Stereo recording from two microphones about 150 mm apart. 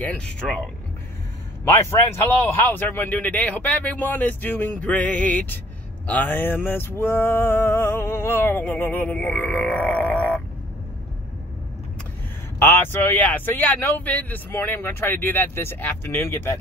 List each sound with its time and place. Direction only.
0.0 s male singing: 10° left (ahead or behind)
1.6 s male singing: 15° left (ahead or behind)
12.5 s male singing: 15° left (ahead or behind)